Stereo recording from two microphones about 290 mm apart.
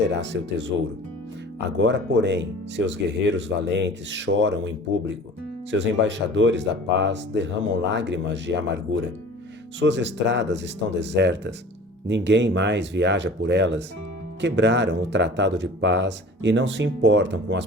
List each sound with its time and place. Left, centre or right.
0.1 s speech: right